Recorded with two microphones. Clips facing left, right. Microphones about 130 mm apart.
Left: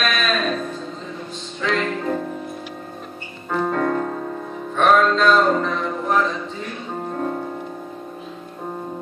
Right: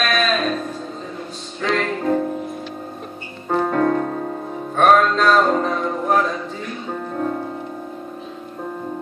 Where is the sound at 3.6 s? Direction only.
45° right (ahead or behind).